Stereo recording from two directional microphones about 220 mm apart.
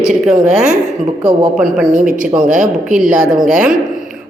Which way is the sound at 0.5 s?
5° right (ahead or behind).